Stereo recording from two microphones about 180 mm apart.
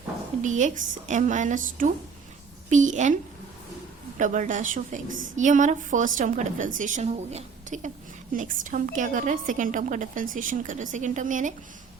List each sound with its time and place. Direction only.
0.4 s a woman's voice: 45° right (ahead or behind)
4.2 s a woman's voice: 45° right (ahead or behind)